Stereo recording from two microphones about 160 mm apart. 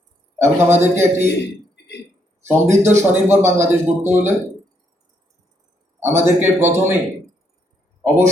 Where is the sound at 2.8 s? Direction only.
15° right (ahead or behind).